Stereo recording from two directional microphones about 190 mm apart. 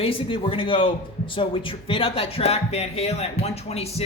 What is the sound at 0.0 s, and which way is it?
Speech, 25° left (ahead or behind).